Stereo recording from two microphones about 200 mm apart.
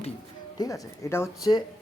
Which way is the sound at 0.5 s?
15° left (ahead or behind).